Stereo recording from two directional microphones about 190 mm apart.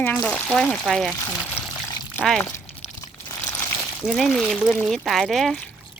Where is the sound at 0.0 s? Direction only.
10° left (ahead or behind).